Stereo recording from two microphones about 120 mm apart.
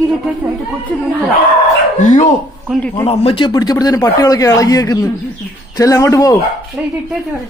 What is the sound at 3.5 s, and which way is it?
Speech, 30° left (ahead or behind).